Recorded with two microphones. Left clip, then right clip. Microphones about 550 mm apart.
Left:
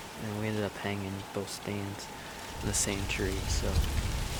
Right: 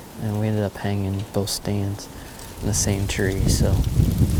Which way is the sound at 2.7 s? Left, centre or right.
Right.